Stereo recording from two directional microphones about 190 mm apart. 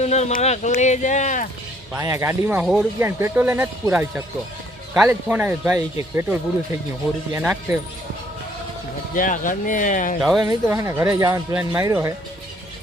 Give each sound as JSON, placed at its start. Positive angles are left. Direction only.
{"t": 0.0, "sound": "speech", "side_deg": 35}
{"t": 1.9, "sound": "speech", "side_deg": -15}
{"t": 9.1, "sound": "speech", "side_deg": 45}
{"t": 10.2, "sound": "speech", "side_deg": 0}
{"t": 10.5, "sound": "speech", "side_deg": -15}